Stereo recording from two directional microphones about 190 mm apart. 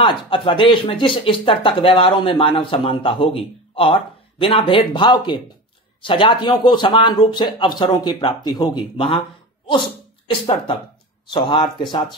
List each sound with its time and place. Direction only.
0.0 s speech: 25° left (ahead or behind)